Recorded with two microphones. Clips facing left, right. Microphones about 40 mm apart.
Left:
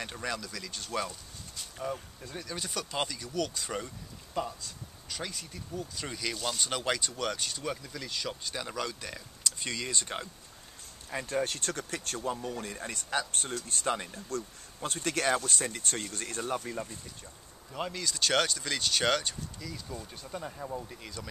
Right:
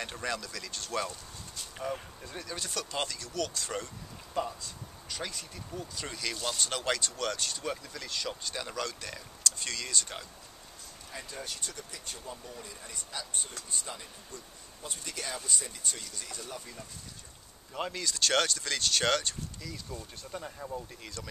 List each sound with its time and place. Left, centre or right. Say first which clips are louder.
0.0 s speech: right 1 dB; centre; by 10.2 s left
11.1 s speech: left 10 dB; left
17.7 s speech: even; centre